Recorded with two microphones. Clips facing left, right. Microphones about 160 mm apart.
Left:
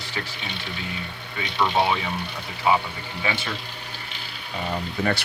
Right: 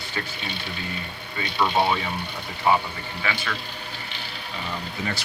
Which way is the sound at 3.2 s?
25° left (ahead or behind).